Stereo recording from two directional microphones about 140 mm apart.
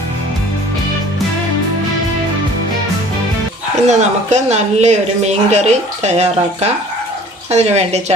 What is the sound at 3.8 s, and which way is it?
Speech, 55° right (ahead or behind).